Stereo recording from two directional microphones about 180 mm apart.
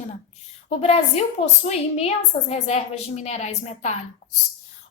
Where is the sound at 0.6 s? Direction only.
35° left (ahead or behind).